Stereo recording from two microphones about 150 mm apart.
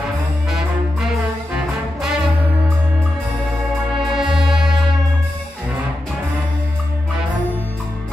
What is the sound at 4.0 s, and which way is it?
Music, 5° right (ahead or behind).